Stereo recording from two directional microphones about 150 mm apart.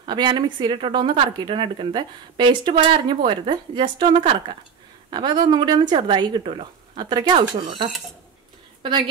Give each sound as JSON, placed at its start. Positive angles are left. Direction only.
{"t": 0.0, "sound": "a woman's voice", "side_deg": -30}